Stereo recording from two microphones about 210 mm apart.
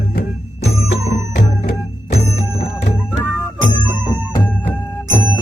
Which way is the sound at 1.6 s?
30° left (ahead or behind).